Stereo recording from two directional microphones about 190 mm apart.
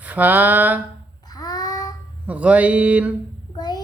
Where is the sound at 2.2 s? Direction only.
5° right (ahead or behind).